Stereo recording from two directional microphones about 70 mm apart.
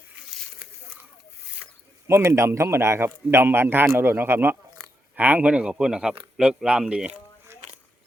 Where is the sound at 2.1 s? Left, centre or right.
Right.